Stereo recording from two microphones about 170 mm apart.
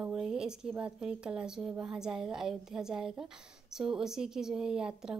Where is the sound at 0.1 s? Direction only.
5° right (ahead or behind).